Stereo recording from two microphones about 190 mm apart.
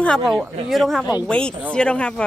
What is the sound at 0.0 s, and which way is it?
Speech, centre (ahead or behind).